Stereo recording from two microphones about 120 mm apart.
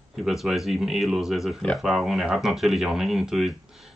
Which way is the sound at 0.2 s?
5° right (ahead or behind).